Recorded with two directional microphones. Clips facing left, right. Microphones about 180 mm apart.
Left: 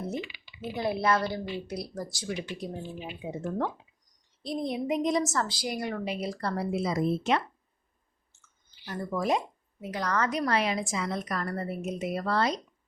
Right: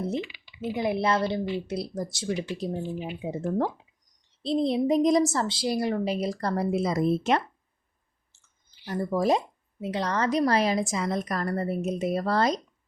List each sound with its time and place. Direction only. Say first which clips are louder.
0.8 s a woman's voice: right 2 dB; 20° right (ahead or behind); by 7.4 s 45° right (ahead or behind)
8.3 s a sound: left 4 dB; 30° right (ahead or behind)
9.8 s a woman's voice: right 3 dB; 25° right (ahead or behind)